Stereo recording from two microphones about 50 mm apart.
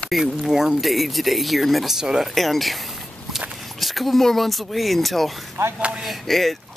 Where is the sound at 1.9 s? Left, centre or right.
Centre.